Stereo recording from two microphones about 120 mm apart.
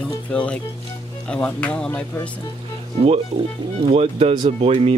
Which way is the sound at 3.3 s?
50° right (ahead or behind).